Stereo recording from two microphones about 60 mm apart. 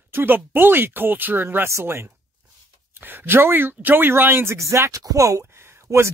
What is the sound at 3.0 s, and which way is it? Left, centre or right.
Speech, right.